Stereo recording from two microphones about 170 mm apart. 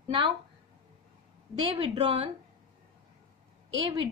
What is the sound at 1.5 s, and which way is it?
Speech, 35° right (ahead or behind).